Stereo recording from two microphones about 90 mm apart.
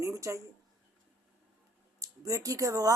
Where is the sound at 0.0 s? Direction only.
35° right (ahead or behind).